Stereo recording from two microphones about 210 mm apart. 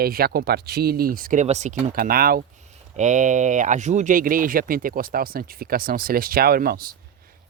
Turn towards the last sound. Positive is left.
turn(degrees=-45)  # may be behind; listen again after turning